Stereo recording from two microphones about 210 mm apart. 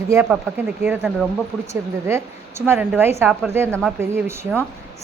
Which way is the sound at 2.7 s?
10° right (ahead or behind).